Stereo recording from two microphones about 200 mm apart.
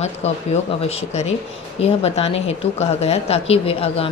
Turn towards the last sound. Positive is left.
turn(degrees=30)  # may be behind; listen again after turning